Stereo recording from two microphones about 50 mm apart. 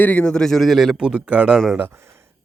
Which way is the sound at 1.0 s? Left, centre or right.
Centre.